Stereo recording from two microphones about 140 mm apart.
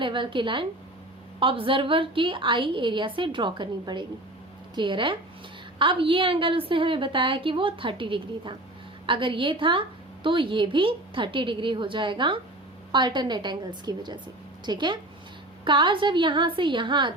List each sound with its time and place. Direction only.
0.0 s a woman's voice: 35° right (ahead or behind)